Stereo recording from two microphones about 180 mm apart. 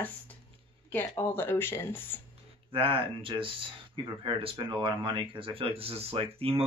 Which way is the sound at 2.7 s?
30° right (ahead or behind).